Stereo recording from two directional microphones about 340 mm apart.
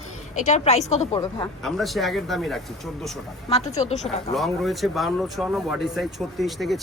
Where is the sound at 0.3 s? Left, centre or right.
Centre.